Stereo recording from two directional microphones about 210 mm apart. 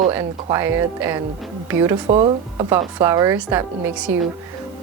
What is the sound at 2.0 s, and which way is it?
Speech, 25° right (ahead or behind).